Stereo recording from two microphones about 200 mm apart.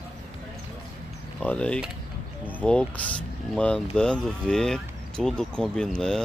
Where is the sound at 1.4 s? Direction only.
5° left (ahead or behind).